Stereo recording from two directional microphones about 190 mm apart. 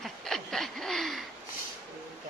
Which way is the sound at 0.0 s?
Centre (ahead or behind).